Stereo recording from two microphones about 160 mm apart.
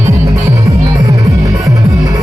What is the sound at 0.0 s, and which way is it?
Music, 20° right (ahead or behind).